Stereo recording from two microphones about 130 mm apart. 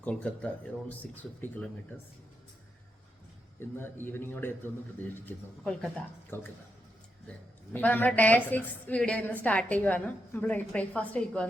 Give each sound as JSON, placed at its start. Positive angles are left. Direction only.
{"t": 0.0, "sound": "a woman's voice", "side_deg": 10}
{"t": 3.6, "sound": "a woman's voice", "side_deg": 15}